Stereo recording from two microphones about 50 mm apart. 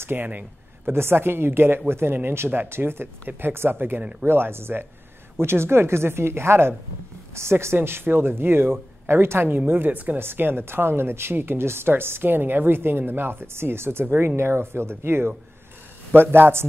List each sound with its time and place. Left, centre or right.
0.0 s speech: right
0.8 s speech: right
10.1 s speech: right